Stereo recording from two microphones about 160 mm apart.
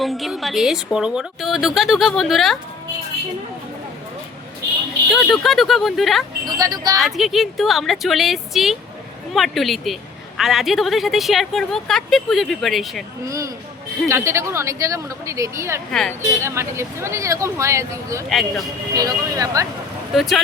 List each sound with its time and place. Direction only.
0.0 s a woman's voice: centre (ahead or behind)
5.1 s a woman's voice: centre (ahead or behind)
6.6 s speech: 25° right (ahead or behind)
6.9 s a woman's voice: centre (ahead or behind)
13.2 s speech: 20° right (ahead or behind)
15.9 s a woman's voice: 5° left (ahead or behind)
16.4 s speech: 15° right (ahead or behind)
18.3 s a woman's voice: centre (ahead or behind)
18.9 s speech: 20° right (ahead or behind)
20.1 s a woman's voice: centre (ahead or behind)